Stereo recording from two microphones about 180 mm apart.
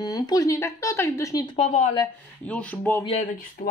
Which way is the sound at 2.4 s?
5° left (ahead or behind).